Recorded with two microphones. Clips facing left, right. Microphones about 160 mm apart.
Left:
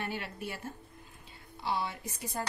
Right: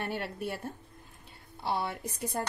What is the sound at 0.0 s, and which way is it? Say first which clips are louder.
Speech: right 3 dB; 55° right (ahead or behind).